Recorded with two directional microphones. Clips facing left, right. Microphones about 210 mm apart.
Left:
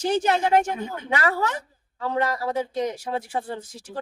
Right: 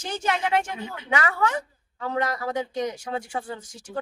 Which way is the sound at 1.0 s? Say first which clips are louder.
Even; 35° left (ahead or behind).